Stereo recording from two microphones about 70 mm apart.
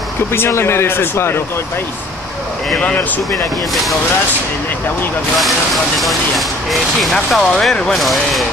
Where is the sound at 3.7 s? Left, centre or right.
Centre.